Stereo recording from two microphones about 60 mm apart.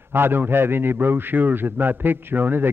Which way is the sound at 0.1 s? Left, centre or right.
Right.